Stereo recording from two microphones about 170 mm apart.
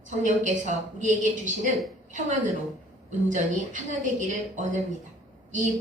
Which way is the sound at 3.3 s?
45° right (ahead or behind).